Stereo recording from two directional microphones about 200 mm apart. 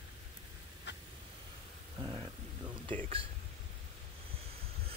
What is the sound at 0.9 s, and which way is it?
Vehicle, 60° left (ahead or behind).